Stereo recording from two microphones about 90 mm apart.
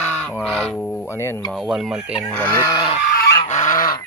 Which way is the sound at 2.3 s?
20° left (ahead or behind).